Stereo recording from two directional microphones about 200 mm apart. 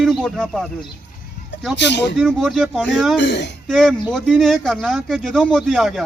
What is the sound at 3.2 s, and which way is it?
Speech, 60° left (ahead or behind).